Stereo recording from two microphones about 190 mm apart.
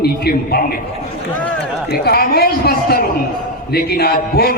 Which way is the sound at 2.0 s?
55° left (ahead or behind).